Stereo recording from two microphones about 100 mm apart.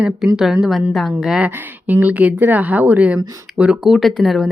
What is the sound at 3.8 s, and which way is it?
Speech, centre (ahead or behind).